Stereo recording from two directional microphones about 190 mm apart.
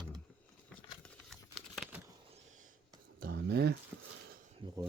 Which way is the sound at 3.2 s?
60° right (ahead or behind).